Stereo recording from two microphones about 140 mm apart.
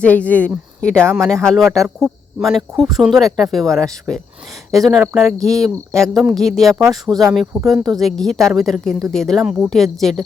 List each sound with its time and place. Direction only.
0.0 s speech: 10° left (ahead or behind)
6.7 s speech: 25° right (ahead or behind)
7.3 s speech: centre (ahead or behind)